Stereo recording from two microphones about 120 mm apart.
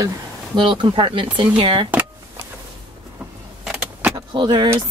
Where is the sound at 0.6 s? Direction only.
40° right (ahead or behind).